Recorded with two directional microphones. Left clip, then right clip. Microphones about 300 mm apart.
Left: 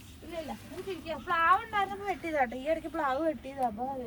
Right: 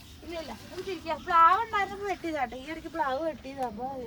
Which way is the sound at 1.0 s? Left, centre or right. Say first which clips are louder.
Right 6 dB; centre.